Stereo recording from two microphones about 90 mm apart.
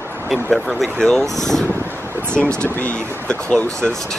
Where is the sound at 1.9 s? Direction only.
25° right (ahead or behind).